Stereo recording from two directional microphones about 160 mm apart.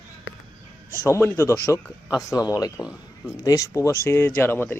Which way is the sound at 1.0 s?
15° left (ahead or behind).